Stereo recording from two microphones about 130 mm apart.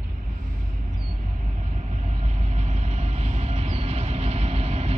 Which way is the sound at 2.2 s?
60° right (ahead or behind).